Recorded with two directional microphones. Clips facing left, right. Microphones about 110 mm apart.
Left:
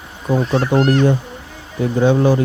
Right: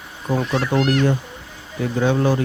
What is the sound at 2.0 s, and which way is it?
Speech, 20° left (ahead or behind).